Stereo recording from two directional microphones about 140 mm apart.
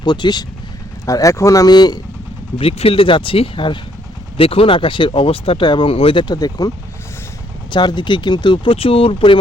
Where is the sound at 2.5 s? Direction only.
45° left (ahead or behind).